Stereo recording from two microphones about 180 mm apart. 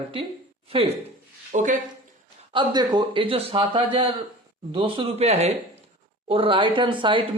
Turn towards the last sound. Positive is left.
turn(degrees=-25)  # may be behind; listen again after turning